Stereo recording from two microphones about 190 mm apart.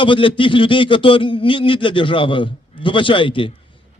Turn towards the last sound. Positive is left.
turn(degrees=25)  # may be behind; listen again after turning